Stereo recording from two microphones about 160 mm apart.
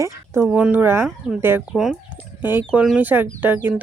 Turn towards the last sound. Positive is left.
turn(degrees=-10)  # may be behind; listen again after turning